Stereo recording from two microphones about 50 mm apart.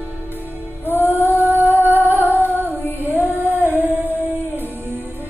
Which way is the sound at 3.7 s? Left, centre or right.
Right.